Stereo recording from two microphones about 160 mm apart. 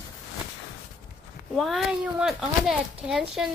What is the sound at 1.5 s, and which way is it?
Speech, centre (ahead or behind).